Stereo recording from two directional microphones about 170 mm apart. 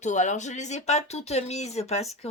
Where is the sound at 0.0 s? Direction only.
45° left (ahead or behind).